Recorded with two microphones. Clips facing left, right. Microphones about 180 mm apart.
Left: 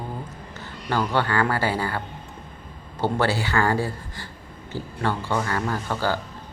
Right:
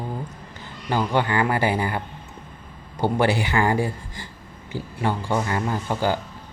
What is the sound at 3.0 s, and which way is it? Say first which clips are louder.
A man's voice: right 2 dB; 15° right (ahead or behind).